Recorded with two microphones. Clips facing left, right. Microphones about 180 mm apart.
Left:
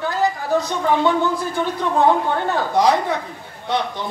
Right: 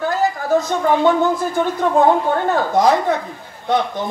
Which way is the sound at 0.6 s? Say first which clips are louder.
Right 2 dB; 45° right (ahead or behind).